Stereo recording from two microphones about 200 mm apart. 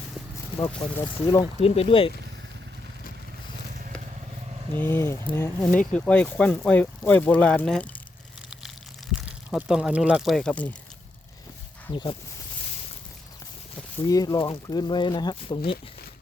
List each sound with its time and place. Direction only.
0.8 s speech: 20° left (ahead or behind)
1.4 s speech: 30° left (ahead or behind)
4.7 s speech: 10° left (ahead or behind)
9.2 s speech: 5° right (ahead or behind)
14.1 s speech: 15° left (ahead or behind)